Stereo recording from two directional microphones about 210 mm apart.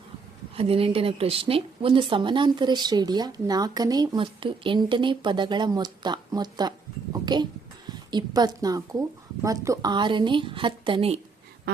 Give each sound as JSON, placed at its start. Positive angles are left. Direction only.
{"t": 0.5, "sound": "speech", "side_deg": -25}